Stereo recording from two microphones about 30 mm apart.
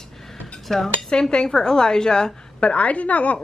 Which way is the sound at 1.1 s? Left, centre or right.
Left.